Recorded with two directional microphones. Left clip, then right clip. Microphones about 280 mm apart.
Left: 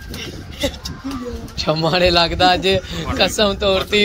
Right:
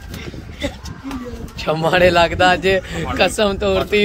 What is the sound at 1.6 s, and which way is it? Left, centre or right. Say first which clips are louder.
Speech: right 2 dB; centre.